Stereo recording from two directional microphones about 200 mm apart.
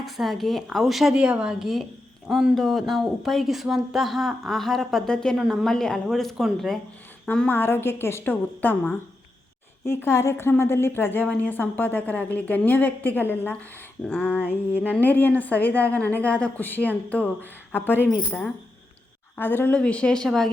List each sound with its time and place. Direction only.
0.0 s a woman's voice: centre (ahead or behind)